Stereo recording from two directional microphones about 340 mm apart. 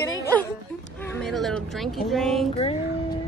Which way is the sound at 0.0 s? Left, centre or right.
Centre.